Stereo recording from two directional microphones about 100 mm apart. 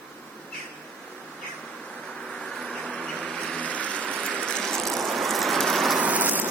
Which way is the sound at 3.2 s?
5° left (ahead or behind).